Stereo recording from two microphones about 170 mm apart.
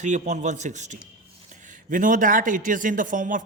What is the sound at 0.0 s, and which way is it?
Speech, 45° right (ahead or behind).